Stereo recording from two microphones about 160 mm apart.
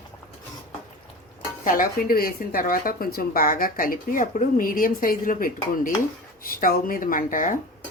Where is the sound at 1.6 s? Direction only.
60° left (ahead or behind).